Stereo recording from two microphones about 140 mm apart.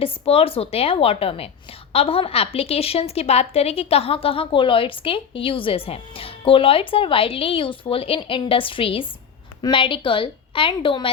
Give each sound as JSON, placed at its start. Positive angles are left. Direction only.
{"t": 0.0, "sound": "a woman's voice", "side_deg": 45}